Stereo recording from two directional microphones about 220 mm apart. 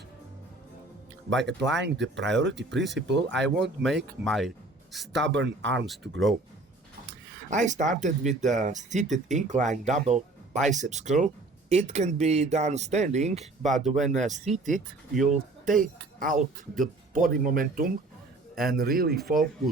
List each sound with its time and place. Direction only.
1.3 s speech: 55° right (ahead or behind)
3.8 s speech: centre (ahead or behind)
5.1 s speech: 55° right (ahead or behind)
7.5 s speech: 35° right (ahead or behind)
13.4 s speech: centre (ahead or behind)
14.2 s speech: 35° right (ahead or behind)
14.7 s speech: centre (ahead or behind)
15.3 s speech: 35° right (ahead or behind)